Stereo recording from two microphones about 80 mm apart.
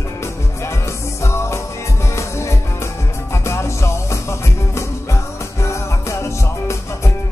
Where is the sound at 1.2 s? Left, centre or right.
Left.